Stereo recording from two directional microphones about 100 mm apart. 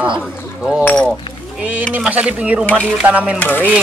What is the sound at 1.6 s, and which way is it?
Speech, 15° right (ahead or behind).